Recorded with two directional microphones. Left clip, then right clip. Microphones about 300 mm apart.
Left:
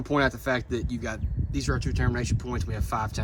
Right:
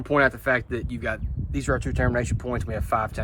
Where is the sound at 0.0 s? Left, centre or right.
Centre.